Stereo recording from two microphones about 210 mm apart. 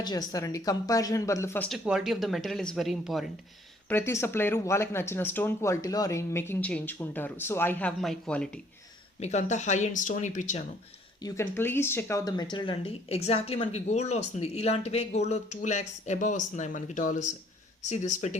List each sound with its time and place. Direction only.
0.0 s speech: 20° left (ahead or behind); by 3.2 s centre (ahead or behind)
3.8 s speech: 10° left (ahead or behind)
9.2 s speech: 35° left (ahead or behind)
11.2 s speech: 15° left (ahead or behind); by 18.3 s 35° left (ahead or behind)